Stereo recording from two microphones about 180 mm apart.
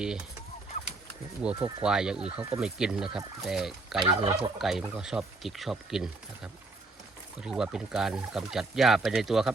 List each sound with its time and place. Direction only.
1.4 s speech: 5° right (ahead or behind)
4.0 s turkey: 25° right (ahead or behind)
4.5 s speech: centre (ahead or behind)